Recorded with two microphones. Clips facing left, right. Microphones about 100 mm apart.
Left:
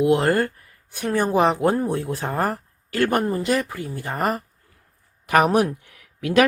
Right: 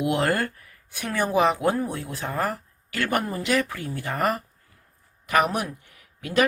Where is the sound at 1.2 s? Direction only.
40° left (ahead or behind).